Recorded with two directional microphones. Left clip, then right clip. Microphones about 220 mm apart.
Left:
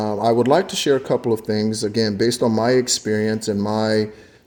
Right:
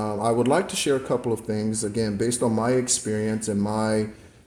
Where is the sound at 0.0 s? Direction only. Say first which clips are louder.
Left 5 dB; 35° left (ahead or behind).